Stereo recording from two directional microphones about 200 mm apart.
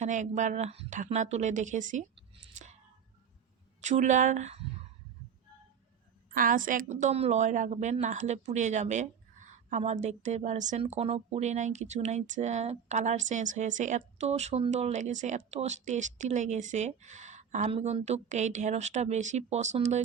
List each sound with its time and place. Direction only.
0.0 s a woman's voice: 40° right (ahead or behind)
3.8 s a woman's voice: 35° right (ahead or behind)
6.3 s a woman's voice: 45° right (ahead or behind)